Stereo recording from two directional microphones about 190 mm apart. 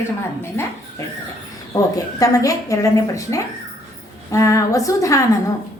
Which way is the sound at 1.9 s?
20° left (ahead or behind).